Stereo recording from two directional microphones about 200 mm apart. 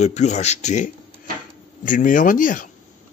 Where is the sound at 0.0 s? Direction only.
35° left (ahead or behind).